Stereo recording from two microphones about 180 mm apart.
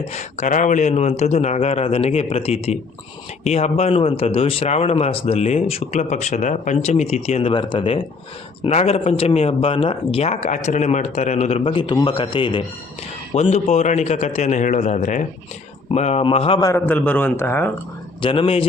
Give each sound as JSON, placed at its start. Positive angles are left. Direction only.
{"t": 0.1, "sound": "speech", "side_deg": 40}
{"t": 13.3, "sound": "speech", "side_deg": 35}
{"t": 16.6, "sound": "a man's voice", "side_deg": 10}
{"t": 18.2, "sound": "speech", "side_deg": 30}